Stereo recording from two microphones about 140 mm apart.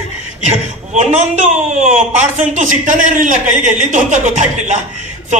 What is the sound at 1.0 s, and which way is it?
A man's voice, 55° right (ahead or behind).